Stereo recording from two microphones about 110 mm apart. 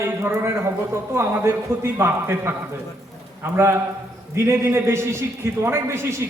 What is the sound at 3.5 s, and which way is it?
A man's voice, 20° right (ahead or behind).